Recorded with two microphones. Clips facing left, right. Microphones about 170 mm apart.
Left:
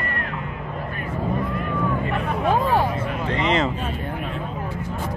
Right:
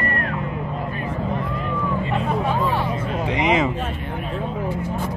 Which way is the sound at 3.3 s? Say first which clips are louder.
Right 2 dB; 10° right (ahead or behind).